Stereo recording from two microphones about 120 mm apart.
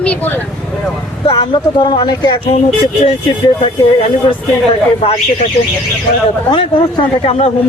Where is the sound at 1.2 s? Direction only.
40° left (ahead or behind).